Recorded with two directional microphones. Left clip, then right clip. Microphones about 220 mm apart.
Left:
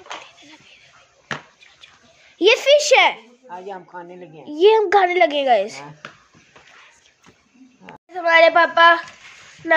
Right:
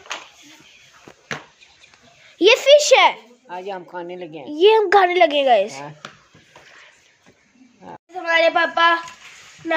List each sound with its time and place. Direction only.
2.3 s a sound: 5° right (ahead or behind)
3.4 s speech: 55° right (ahead or behind)
4.5 s speech: 5° right (ahead or behind)
8.1 s a woman's voice: 10° left (ahead or behind)